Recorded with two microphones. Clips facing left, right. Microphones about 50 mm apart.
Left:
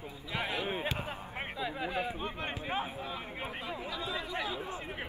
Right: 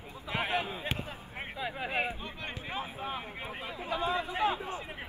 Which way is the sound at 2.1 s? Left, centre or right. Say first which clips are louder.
Left 3 dB; left.